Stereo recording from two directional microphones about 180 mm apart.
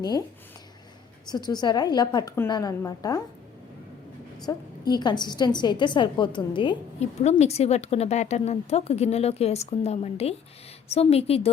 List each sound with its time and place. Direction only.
1.3 s a woman's voice: 25° left (ahead or behind)
4.4 s a woman's voice: 25° left (ahead or behind)